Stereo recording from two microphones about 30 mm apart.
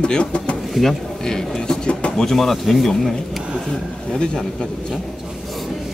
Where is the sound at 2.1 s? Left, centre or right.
Centre.